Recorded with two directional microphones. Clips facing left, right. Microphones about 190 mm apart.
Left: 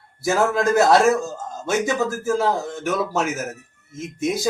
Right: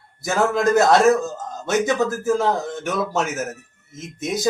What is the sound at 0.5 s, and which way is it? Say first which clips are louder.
A man's voice: right 1 dB; 5° left (ahead or behind).